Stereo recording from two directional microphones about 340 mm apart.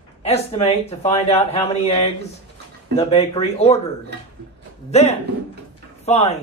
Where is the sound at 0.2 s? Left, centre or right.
Centre.